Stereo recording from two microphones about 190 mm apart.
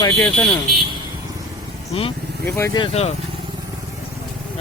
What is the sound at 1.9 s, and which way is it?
Speech, 30° left (ahead or behind).